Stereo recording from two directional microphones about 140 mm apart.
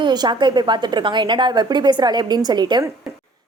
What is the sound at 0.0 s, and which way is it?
Speech, 30° right (ahead or behind).